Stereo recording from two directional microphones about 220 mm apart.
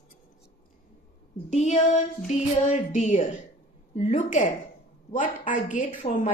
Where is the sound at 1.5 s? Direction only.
30° left (ahead or behind).